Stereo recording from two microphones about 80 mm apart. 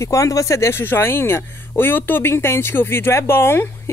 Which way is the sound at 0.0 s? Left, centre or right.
Left.